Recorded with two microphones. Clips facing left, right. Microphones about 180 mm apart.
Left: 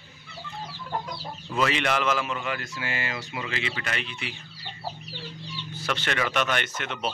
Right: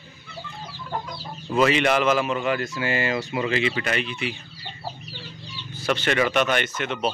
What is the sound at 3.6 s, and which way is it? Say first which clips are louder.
Speech: right 8 dB; 15° right (ahead or behind).